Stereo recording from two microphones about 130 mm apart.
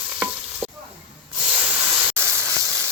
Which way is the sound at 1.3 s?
10° right (ahead or behind).